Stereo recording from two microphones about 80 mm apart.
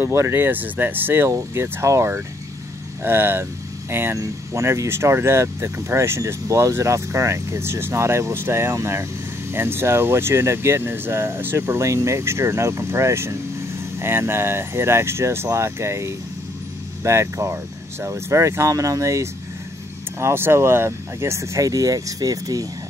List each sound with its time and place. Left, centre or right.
0.0 s speech: right
4.2 s speech: right
20.2 s speech: right